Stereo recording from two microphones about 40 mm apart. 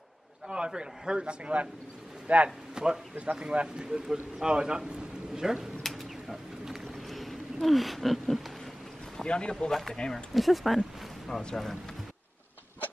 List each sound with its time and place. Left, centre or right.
0.5 s a man's voice: centre
2.2 s speech: right
2.7 s a man's voice: centre
6.2 s a sound: centre
9.1 s speech: left
9.7 s speech: centre
9.9 s speech: left
10.3 s a sound: centre
11.2 s speech: centre